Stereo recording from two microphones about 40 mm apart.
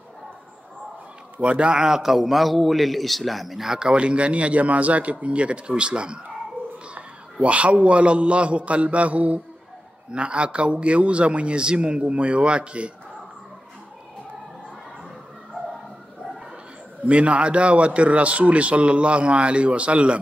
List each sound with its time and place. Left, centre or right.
1.4 s a man's voice: right; by 3.9 s centre
3.9 s a man's voice: right
17.0 s a man's voice: right